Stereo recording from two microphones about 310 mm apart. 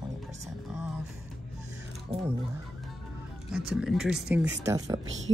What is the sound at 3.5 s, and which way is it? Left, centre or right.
Speech, centre.